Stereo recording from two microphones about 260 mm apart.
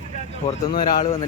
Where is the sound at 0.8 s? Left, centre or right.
Left.